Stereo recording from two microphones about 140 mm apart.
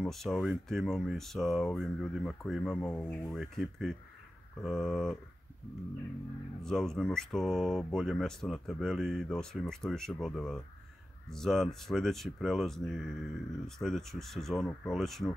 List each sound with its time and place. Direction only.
0.0 s speech: 5° left (ahead or behind)
2.9 s speech: 15° left (ahead or behind)
3.3 s speech: centre (ahead or behind)
6.6 s speech: 5° left (ahead or behind)